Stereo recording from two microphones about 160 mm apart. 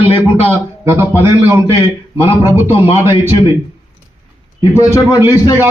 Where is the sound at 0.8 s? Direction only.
15° right (ahead or behind).